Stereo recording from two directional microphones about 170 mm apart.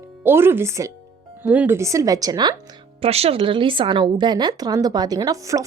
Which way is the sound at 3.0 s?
35° right (ahead or behind).